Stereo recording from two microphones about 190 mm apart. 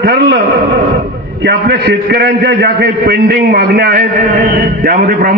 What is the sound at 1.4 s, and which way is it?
A man's voice, 60° right (ahead or behind).